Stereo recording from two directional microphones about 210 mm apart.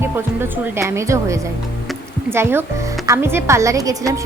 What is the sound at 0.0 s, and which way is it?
A woman's voice, 10° right (ahead or behind).